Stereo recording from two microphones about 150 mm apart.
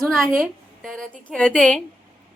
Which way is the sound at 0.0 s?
Centre (ahead or behind).